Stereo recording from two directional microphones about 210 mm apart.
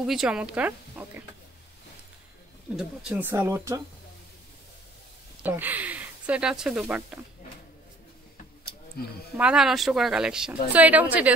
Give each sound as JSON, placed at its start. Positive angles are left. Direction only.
{"t": 0.0, "sound": "speech", "side_deg": 0}
{"t": 2.7, "sound": "speech", "side_deg": -5}
{"t": 5.4, "sound": "speech", "side_deg": -10}
{"t": 9.4, "sound": "speech", "side_deg": -5}